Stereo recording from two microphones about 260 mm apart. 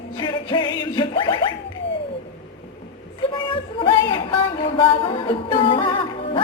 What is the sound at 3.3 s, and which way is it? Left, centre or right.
Speech, centre.